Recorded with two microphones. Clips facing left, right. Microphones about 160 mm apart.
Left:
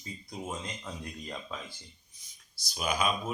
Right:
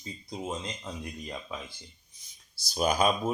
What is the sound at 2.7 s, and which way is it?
Speech, 40° right (ahead or behind).